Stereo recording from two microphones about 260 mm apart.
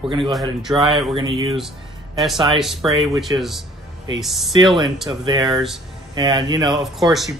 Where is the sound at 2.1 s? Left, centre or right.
Centre.